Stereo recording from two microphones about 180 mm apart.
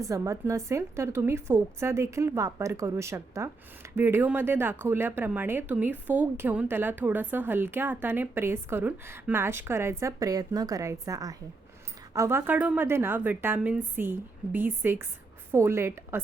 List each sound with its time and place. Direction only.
0.0 s speech: 15° right (ahead or behind)